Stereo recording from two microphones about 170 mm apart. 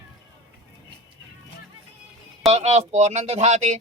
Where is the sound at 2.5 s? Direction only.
40° right (ahead or behind).